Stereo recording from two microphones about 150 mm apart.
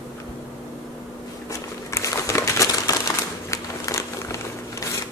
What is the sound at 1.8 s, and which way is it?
Crumpling, 20° left (ahead or behind).